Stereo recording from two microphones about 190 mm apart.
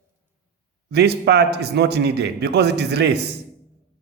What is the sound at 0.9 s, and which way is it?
A man's voice, 60° right (ahead or behind).